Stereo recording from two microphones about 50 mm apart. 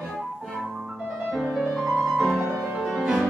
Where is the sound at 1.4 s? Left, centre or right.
Centre.